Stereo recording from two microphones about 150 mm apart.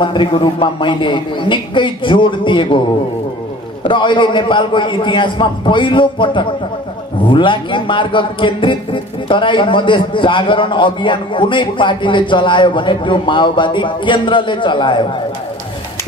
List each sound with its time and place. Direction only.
0.0 s a man's voice: 30° left (ahead or behind)
3.8 s a man's voice: 35° left (ahead or behind)